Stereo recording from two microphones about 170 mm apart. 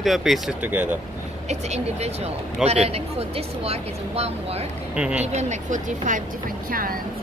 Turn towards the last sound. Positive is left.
turn(degrees=-55)  # may be behind; listen again after turning